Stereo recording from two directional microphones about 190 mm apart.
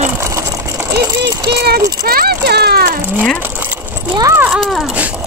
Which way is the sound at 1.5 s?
60° right (ahead or behind).